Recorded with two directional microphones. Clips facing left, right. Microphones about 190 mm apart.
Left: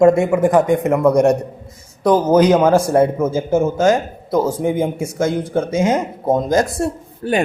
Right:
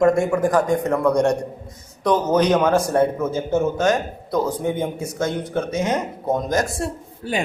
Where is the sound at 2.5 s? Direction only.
25° left (ahead or behind).